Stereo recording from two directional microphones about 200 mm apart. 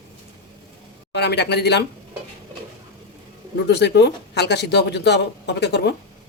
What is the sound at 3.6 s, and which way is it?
Speech, 60° left (ahead or behind).